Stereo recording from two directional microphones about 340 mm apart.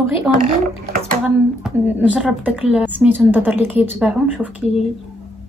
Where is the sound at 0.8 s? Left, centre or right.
Right.